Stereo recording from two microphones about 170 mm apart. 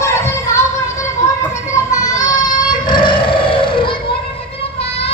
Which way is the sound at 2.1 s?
25° left (ahead or behind).